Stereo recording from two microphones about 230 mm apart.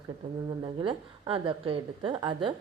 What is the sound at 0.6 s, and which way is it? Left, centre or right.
A woman's voice, centre.